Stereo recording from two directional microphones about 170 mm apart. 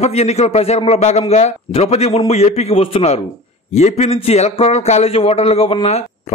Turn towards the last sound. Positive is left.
turn(degrees=40)  # may be behind; listen again after turning